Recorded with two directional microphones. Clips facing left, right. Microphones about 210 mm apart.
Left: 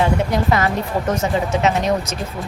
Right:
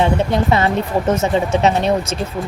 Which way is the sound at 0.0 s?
25° right (ahead or behind).